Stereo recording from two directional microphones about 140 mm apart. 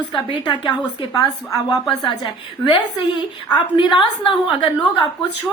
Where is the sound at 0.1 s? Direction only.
35° left (ahead or behind).